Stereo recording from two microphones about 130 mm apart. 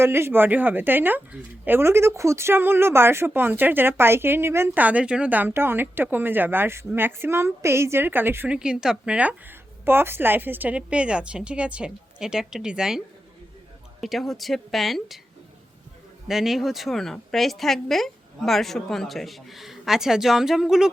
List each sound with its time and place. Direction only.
0.0 s speech: 20° right (ahead or behind)
14.0 s a woman's voice: centre (ahead or behind)
16.3 s a woman's voice: centre (ahead or behind)